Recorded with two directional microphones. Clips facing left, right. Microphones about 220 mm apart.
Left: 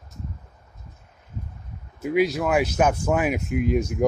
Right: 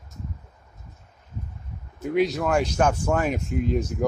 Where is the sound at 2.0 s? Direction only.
5° left (ahead or behind).